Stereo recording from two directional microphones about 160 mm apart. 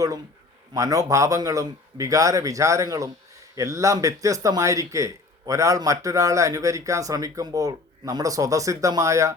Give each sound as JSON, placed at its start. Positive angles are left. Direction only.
{"t": 0.7, "sound": "speech", "side_deg": -20}